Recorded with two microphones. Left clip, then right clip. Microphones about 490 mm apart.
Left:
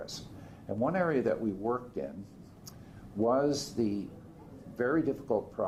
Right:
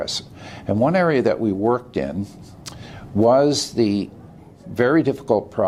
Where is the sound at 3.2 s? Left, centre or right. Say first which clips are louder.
Right 13 dB; right.